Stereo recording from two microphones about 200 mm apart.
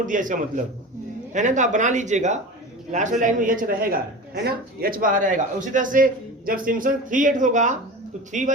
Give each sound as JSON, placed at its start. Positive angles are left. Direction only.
{"t": 0.0, "sound": "a man's voice", "side_deg": -40}